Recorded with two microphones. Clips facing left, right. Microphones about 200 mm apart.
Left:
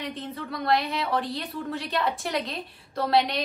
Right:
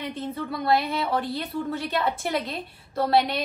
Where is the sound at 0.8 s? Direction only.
Centre (ahead or behind).